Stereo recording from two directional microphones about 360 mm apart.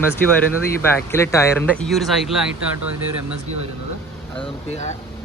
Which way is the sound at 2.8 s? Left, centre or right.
Right.